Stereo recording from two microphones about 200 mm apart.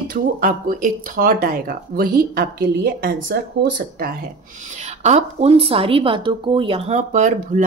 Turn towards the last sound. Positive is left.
turn(degrees=-40)  # may be behind; listen again after turning